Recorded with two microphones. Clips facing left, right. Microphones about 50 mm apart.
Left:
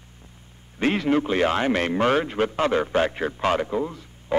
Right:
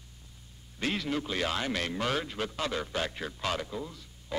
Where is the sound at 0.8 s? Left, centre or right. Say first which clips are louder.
Left 10 dB; left.